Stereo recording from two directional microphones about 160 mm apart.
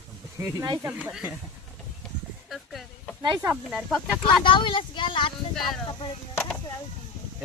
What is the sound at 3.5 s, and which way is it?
Speech, 5° right (ahead or behind).